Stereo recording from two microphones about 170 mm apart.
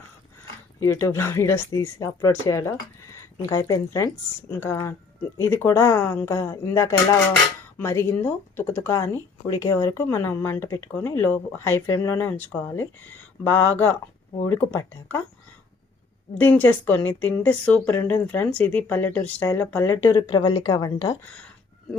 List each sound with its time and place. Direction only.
0.8 s speech: 15° left (ahead or behind)
16.4 s a woman's voice: 10° left (ahead or behind)